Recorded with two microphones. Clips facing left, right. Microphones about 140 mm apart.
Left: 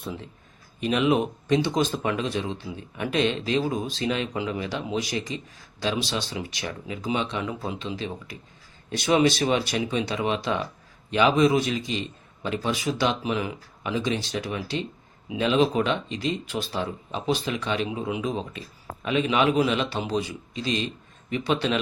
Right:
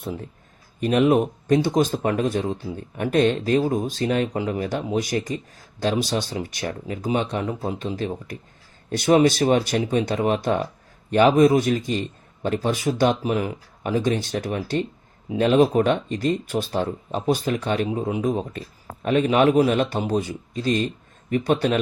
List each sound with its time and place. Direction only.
0.0 s speech: 50° right (ahead or behind)
17.8 s speech: 40° right (ahead or behind)